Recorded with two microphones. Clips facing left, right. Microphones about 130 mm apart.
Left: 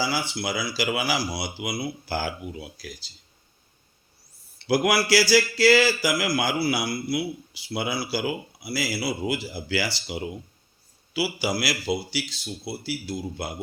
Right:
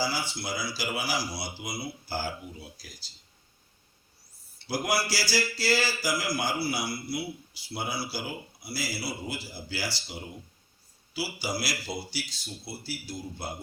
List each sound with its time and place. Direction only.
0.0 s speech: 75° left (ahead or behind)
4.5 s speech: 75° left (ahead or behind)